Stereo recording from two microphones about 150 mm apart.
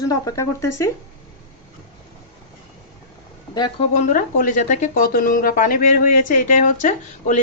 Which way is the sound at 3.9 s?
60° left (ahead or behind).